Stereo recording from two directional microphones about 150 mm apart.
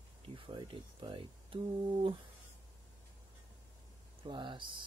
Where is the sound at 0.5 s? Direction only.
35° right (ahead or behind).